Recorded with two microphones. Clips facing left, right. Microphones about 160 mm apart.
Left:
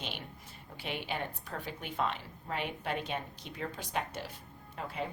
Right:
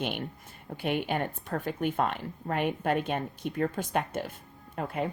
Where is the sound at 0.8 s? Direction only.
50° right (ahead or behind).